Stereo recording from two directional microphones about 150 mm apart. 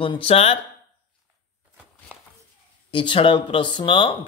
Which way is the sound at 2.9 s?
35° left (ahead or behind).